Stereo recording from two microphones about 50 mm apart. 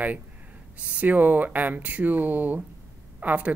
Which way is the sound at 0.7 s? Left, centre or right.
Right.